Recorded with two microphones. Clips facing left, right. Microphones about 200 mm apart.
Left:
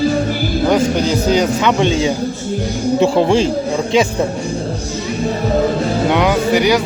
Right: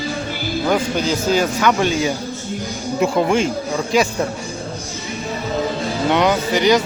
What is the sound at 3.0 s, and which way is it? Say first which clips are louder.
Speech: left 3 dB; 30° left (ahead or behind).